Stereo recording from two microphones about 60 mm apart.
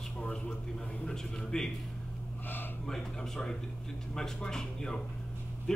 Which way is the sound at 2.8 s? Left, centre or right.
Centre.